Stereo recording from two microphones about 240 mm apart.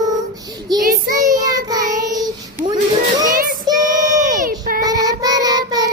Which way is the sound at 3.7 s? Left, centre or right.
Centre.